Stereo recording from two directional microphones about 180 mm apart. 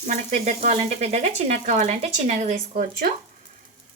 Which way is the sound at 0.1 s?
40° right (ahead or behind).